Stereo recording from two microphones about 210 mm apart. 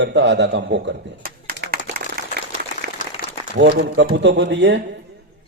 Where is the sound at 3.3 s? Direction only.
55° right (ahead or behind).